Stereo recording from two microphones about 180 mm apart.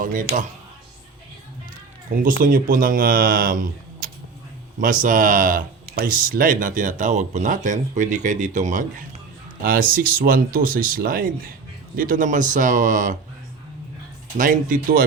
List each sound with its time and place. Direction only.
0.0 s speech: 50° right (ahead or behind)
2.0 s speech: 50° right (ahead or behind)
14.3 s speech: 50° right (ahead or behind)